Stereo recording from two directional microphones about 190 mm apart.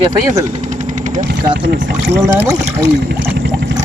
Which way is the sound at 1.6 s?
70° right (ahead or behind).